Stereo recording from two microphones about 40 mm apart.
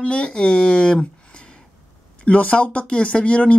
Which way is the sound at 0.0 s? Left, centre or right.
Left.